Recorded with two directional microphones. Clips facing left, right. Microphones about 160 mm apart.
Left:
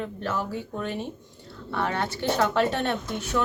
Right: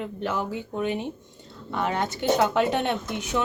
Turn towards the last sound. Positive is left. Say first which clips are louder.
# right 1 dB
turn(degrees=-20)  # may be behind; listen again after turning